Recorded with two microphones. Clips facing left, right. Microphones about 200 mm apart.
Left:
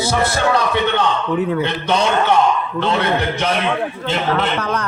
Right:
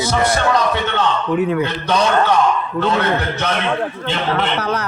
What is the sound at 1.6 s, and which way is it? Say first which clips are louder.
Speech: even; 25° left (ahead or behind).